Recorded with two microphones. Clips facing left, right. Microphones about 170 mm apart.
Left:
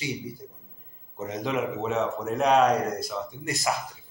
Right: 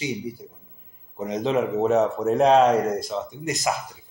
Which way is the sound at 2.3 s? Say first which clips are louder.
Right 4 dB; 30° right (ahead or behind).